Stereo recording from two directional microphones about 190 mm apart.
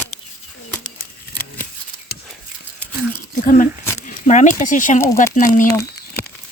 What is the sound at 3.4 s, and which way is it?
Speech, 45° left (ahead or behind).